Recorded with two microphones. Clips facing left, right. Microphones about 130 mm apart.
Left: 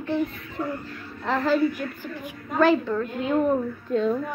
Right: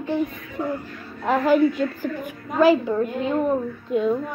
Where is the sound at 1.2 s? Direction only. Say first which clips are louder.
Right 4 dB; 15° right (ahead or behind).